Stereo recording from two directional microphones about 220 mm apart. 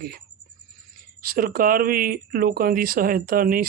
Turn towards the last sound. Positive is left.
turn(degrees=-40)  # may be behind; listen again after turning